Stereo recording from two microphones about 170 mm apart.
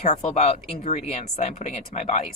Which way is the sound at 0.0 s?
45° left (ahead or behind).